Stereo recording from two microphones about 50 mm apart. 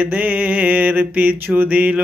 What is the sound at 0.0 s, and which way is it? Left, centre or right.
Mantra, right.